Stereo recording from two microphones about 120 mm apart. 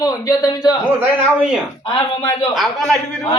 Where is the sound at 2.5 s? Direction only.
Centre (ahead or behind).